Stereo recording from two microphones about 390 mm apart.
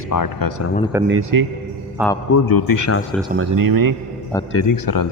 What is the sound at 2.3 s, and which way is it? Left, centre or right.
Speech, left.